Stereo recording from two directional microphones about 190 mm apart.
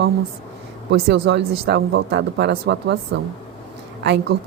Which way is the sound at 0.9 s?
65° right (ahead or behind).